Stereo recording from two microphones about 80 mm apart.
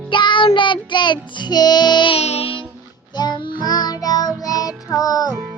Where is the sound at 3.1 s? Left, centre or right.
Left.